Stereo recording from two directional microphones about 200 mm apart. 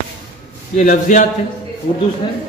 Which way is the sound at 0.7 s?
40° left (ahead or behind).